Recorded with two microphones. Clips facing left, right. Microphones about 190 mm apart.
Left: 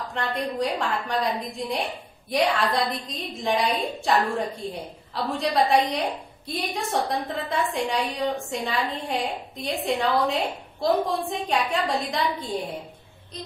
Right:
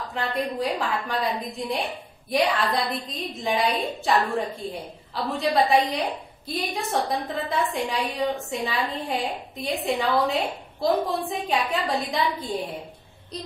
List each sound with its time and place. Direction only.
0.1 s a woman's voice: centre (ahead or behind)